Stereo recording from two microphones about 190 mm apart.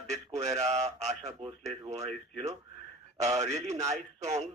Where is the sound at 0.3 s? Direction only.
35° right (ahead or behind).